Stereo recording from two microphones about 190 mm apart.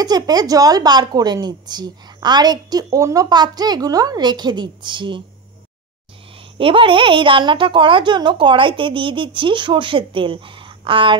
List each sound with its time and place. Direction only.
0.0 s a woman's voice: 20° right (ahead or behind)
6.6 s a woman's voice: 25° right (ahead or behind)